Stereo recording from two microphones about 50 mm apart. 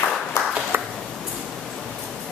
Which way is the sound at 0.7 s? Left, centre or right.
Right.